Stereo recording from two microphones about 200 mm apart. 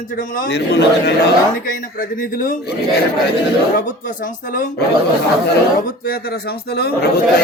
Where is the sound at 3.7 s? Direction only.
40° left (ahead or behind).